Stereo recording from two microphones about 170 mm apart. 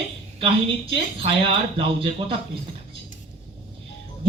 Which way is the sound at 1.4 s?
30° right (ahead or behind).